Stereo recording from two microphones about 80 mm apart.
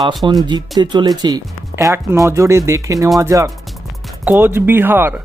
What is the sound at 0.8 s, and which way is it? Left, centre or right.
Speech, right.